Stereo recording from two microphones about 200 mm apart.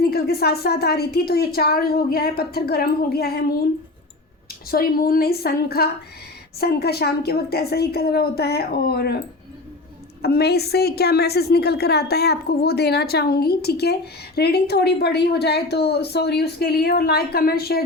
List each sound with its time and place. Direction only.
0.0 s a woman's voice: 50° left (ahead or behind)
4.7 s a woman's voice: 50° left (ahead or behind)
10.2 s a woman's voice: 50° left (ahead or behind)